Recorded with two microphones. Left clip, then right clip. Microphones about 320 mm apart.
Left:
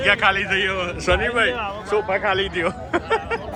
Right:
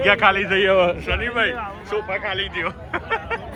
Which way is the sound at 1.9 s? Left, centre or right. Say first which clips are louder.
Left 4 dB; centre.